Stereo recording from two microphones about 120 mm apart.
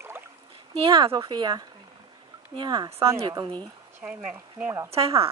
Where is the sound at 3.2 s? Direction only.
40° right (ahead or behind).